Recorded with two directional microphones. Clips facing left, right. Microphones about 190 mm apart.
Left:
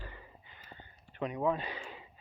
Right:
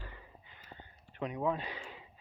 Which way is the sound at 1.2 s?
Centre (ahead or behind).